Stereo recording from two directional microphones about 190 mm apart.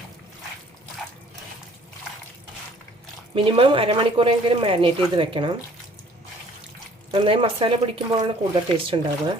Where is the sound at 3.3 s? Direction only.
30° right (ahead or behind).